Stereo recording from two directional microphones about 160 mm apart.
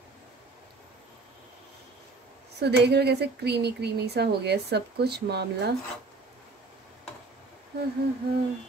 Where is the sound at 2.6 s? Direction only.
90° right.